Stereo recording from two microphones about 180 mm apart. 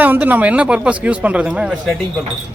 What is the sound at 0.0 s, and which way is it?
Speech, 10° right (ahead or behind).